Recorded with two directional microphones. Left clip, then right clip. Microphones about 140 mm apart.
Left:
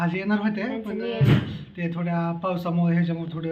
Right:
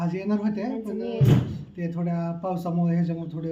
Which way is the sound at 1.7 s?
20° right (ahead or behind).